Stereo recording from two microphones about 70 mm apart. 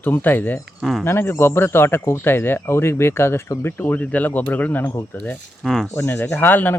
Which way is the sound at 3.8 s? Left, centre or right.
Left.